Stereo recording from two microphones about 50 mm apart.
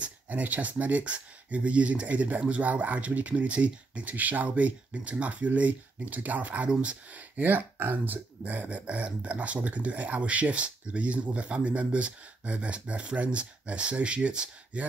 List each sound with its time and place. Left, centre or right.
0.0 s speech: right